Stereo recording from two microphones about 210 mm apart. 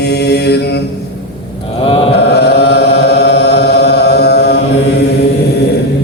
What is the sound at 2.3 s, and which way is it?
Chant, 50° left (ahead or behind).